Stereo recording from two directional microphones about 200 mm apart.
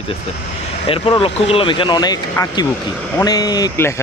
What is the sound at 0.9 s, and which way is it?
Speech, 25° left (ahead or behind).